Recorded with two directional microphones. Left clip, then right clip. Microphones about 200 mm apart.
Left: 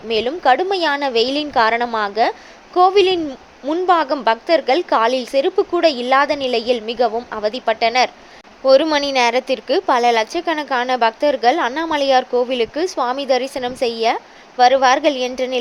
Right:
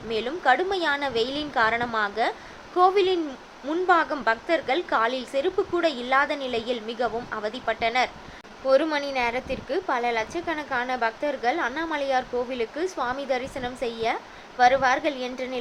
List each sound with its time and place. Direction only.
0.1 s a woman's voice: 35° left (ahead or behind)